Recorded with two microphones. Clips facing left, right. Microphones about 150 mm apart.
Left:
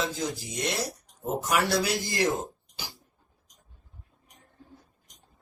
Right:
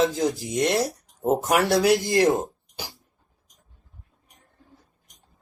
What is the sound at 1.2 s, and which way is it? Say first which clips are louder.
Speech: right 6 dB; 60° right (ahead or behind).